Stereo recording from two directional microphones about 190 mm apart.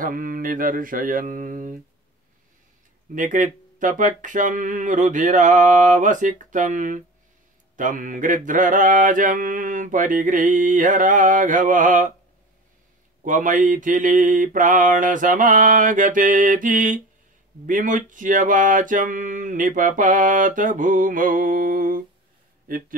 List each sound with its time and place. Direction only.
0.0 s mantra: 45° right (ahead or behind)
3.2 s speech: 40° right (ahead or behind)
7.7 s mantra: 45° right (ahead or behind)
13.2 s mantra: 45° right (ahead or behind)